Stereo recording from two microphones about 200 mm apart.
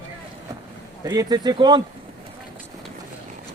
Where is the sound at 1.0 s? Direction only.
20° right (ahead or behind).